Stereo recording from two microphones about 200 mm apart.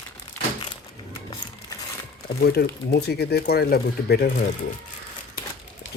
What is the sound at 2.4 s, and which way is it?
Speech, 50° left (ahead or behind).